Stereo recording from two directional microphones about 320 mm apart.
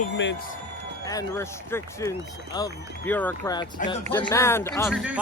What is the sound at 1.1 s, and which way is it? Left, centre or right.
Speech, centre.